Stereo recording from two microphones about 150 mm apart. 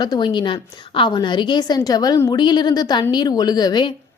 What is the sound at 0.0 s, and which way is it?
A woman's voice, 30° left (ahead or behind).